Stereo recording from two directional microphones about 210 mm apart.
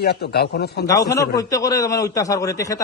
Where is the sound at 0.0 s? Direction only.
50° left (ahead or behind).